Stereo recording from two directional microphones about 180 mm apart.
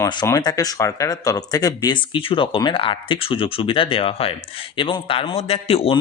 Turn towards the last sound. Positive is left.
turn(degrees=35)  # may be behind; listen again after turning